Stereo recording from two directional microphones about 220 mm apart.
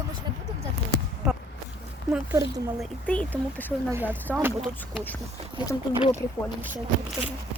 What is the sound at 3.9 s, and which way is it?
Speech, 10° right (ahead or behind).